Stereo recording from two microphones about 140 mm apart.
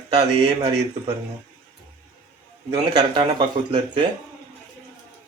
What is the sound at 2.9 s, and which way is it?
A man's voice, 35° right (ahead or behind).